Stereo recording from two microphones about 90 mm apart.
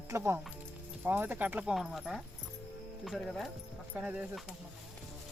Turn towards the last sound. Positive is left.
turn(degrees=-15)  # may be behind; listen again after turning